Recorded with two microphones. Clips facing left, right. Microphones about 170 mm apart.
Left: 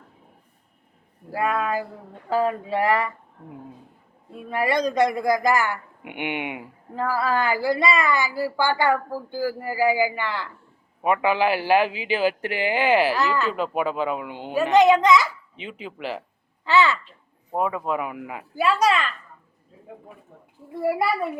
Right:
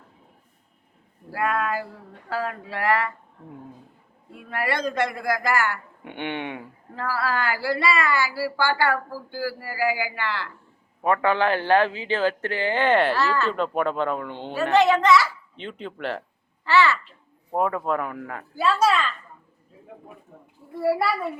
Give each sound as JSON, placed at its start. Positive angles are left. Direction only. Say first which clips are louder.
{"t": 1.3, "sound": "speech", "louder": "left 1 dB", "side_deg": 20}
{"t": 4.4, "sound": "a man's voice", "louder": "left 4 dB", "side_deg": 15}
{"t": 15.5, "sound": "speech", "louder": "right 1 dB", "side_deg": 5}
{"t": 16.6, "sound": "speech", "louder": "even", "side_deg": 20}
{"t": 17.5, "sound": "a man's voice", "louder": "right 1 dB", "side_deg": 5}